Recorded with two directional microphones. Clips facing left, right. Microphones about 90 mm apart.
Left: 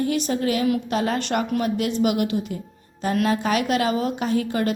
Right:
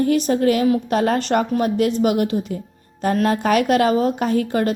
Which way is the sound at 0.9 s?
45° right (ahead or behind).